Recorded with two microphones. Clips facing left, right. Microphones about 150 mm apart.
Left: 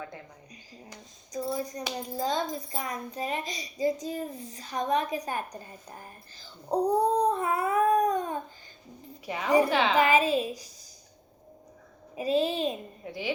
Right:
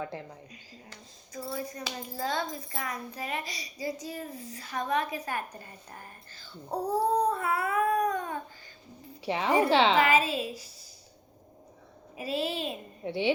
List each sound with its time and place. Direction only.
0.9 s speech: 20° left (ahead or behind)
9.2 s speech: 30° right (ahead or behind)
10.0 s a woman's voice: 15° left (ahead or behind)
12.1 s speech: 20° left (ahead or behind)
13.1 s speech: 30° right (ahead or behind)